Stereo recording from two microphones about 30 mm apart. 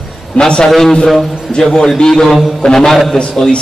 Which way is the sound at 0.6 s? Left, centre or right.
Centre.